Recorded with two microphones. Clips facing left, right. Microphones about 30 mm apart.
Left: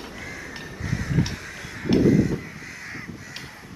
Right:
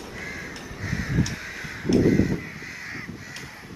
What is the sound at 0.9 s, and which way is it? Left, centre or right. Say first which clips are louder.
Crow: left 1 dB; centre.